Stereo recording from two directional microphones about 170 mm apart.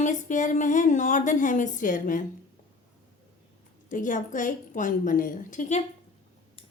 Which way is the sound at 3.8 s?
50° left (ahead or behind).